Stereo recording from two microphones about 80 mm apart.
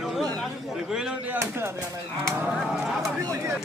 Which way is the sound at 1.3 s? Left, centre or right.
Right.